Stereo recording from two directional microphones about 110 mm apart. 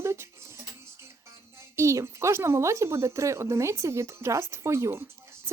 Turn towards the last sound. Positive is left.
turn(degrees=-25)  # may be behind; listen again after turning